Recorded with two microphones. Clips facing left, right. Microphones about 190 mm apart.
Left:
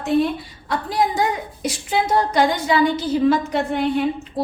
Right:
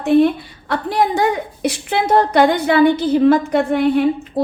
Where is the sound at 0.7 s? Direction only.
60° right (ahead or behind).